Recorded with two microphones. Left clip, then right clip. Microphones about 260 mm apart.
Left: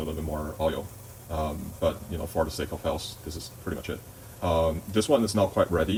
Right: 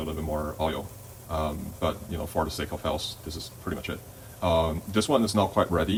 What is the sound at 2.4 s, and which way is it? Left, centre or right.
Speech, centre.